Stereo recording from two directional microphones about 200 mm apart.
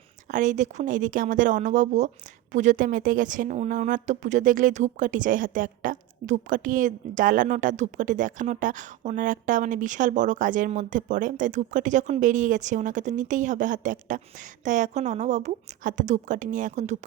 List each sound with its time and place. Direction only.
0.3 s a woman's voice: 40° right (ahead or behind)